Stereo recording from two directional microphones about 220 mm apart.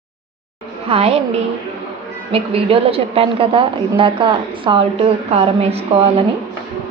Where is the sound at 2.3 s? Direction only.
25° right (ahead or behind).